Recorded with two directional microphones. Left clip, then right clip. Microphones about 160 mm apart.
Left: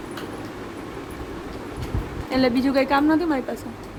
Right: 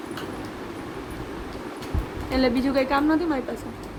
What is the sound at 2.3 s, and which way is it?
A woman's voice, 20° left (ahead or behind).